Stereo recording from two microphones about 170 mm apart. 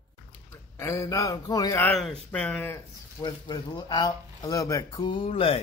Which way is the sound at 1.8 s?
Centre (ahead or behind).